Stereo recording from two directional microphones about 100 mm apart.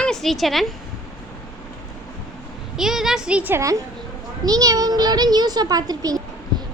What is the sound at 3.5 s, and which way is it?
A child's voice, 30° right (ahead or behind).